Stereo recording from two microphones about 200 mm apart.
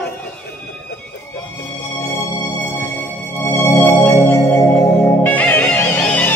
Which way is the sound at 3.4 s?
15° left (ahead or behind).